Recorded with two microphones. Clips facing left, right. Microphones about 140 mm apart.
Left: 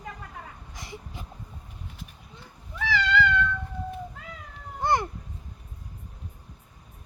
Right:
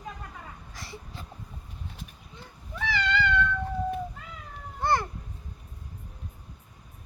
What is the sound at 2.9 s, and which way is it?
Cat, centre (ahead or behind).